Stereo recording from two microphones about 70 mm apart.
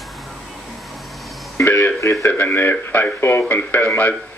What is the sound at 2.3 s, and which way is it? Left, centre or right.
A man's voice, left.